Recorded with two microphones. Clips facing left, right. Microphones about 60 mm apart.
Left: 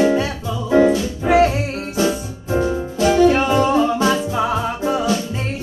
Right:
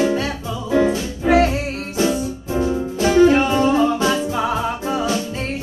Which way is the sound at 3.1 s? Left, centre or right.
Centre.